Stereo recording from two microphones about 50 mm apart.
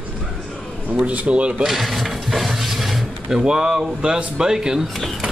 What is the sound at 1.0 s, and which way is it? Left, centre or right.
Speech, right.